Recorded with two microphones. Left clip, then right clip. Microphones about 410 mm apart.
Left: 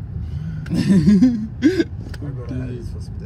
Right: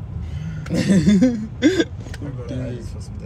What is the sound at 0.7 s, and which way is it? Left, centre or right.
Speech, centre.